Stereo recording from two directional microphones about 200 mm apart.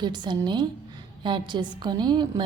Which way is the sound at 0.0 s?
20° right (ahead or behind).